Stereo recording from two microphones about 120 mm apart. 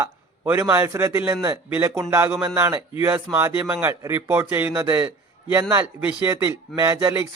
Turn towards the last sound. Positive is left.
turn(degrees=-25)  # may be behind; listen again after turning